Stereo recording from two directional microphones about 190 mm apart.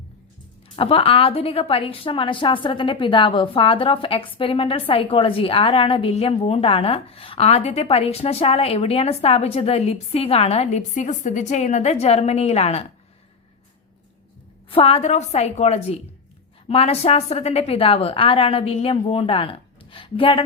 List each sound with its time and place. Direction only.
0.8 s a woman's voice: 30° left (ahead or behind)
14.7 s a woman's voice: 30° left (ahead or behind)